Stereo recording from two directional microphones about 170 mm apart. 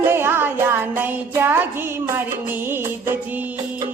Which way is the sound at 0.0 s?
15° right (ahead or behind).